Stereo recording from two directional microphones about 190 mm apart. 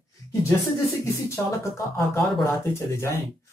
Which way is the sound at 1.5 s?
15° left (ahead or behind).